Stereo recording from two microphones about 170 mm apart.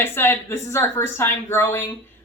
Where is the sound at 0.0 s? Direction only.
15° left (ahead or behind).